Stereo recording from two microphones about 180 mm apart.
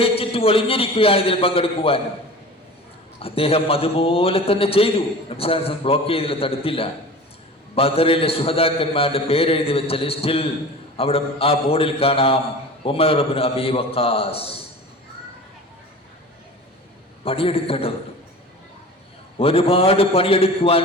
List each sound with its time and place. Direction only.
0.0 s a man's voice: 30° left (ahead or behind)
3.2 s a man's voice: 30° left (ahead or behind)
17.2 s a man's voice: 30° left (ahead or behind)
19.4 s a man's voice: 30° left (ahead or behind)